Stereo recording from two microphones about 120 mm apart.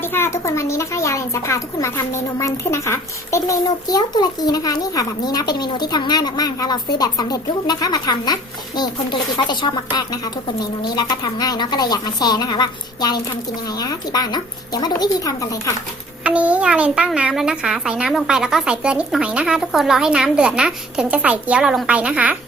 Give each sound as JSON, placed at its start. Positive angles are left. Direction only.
{"t": 0.0, "sound": "a child's voice", "side_deg": 20}
{"t": 16.2, "sound": "a woman's voice", "side_deg": -10}